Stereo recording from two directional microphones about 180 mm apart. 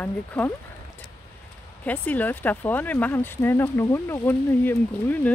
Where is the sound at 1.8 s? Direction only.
10° left (ahead or behind).